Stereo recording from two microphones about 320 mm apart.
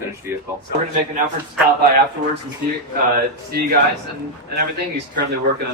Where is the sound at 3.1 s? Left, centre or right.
Right.